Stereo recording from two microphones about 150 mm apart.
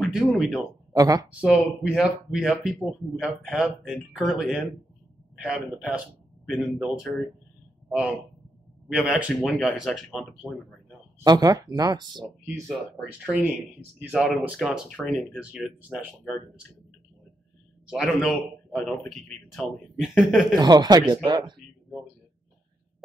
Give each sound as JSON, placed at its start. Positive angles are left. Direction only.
{"t": 0.0, "sound": "speech", "side_deg": 0}
{"t": 0.9, "sound": "speech", "side_deg": -25}
{"t": 1.4, "sound": "speech", "side_deg": -5}
{"t": 8.8, "sound": "speech", "side_deg": -5}
{"t": 11.2, "sound": "speech", "side_deg": -25}
{"t": 13.2, "sound": "speech", "side_deg": -10}
{"t": 17.8, "sound": "speech", "side_deg": -5}
{"t": 20.5, "sound": "speech", "side_deg": -30}